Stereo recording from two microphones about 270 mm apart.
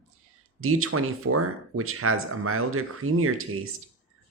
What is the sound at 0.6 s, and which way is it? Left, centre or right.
Speech, right.